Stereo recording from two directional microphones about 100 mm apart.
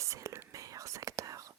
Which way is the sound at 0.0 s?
30° right (ahead or behind).